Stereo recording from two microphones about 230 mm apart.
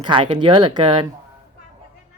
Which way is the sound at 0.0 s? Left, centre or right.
Centre.